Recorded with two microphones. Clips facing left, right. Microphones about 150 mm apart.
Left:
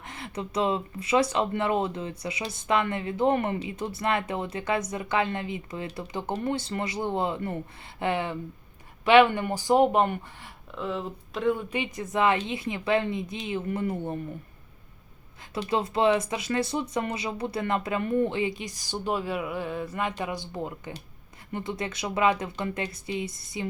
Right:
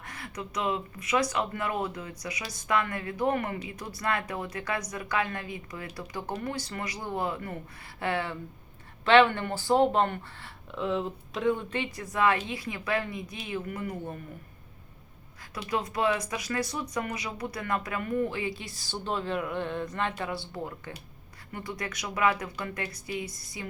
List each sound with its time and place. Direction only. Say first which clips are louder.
0.0 s speech: left 4 dB; 25° left (ahead or behind)
10.7 s speech: right 2 dB; centre (ahead or behind)
11.7 s speech: left 3 dB; 15° left (ahead or behind)
15.5 s speech: left 4 dB; 25° left (ahead or behind)